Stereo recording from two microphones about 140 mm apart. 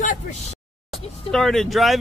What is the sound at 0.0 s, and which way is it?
Speech, 65° left (ahead or behind).